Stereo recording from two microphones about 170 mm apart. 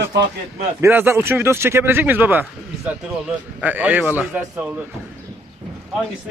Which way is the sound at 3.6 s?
10° right (ahead or behind).